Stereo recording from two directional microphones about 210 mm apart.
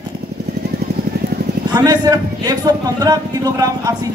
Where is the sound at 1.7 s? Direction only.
20° right (ahead or behind).